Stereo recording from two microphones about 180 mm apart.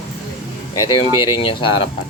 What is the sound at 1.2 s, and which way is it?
Speech, 30° left (ahead or behind).